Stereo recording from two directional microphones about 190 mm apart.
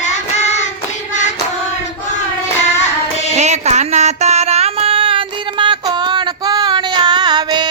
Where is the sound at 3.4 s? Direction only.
35° right (ahead or behind).